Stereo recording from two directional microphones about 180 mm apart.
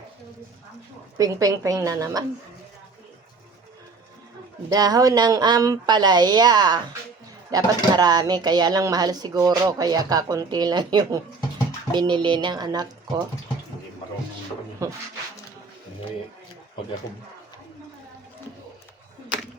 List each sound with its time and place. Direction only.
1.2 s speech: 20° right (ahead or behind)
4.7 s speech: 20° right (ahead or behind)
14.8 s speech: 15° right (ahead or behind)